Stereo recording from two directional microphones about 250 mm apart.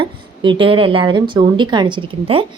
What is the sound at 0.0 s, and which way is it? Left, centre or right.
A woman's voice, right.